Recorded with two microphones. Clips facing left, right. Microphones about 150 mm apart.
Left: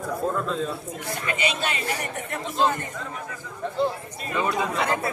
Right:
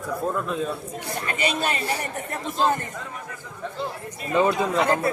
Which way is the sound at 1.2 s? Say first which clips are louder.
Right 2 dB; 40° right (ahead or behind).